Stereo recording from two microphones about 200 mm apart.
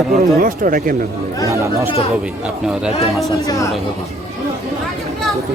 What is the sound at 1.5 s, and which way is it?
Speech, 15° right (ahead or behind).